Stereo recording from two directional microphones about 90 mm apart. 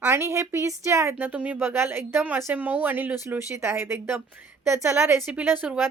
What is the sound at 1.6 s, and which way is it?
Speech, 25° right (ahead or behind).